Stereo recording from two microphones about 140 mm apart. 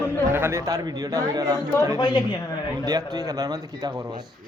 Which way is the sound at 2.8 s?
25° right (ahead or behind).